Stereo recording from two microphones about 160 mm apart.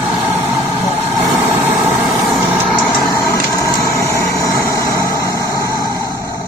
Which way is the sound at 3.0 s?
20° left (ahead or behind).